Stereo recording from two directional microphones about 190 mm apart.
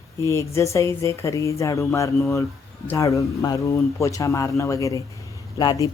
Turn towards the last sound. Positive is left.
turn(degrees=20)  # may be behind; listen again after turning